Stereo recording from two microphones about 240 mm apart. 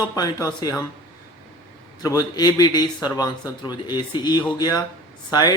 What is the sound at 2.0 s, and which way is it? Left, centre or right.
Speech, centre.